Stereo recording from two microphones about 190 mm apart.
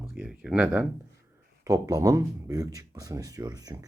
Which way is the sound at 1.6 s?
20° right (ahead or behind).